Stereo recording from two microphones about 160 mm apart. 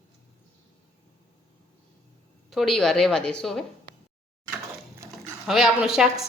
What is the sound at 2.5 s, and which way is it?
Speech, centre (ahead or behind).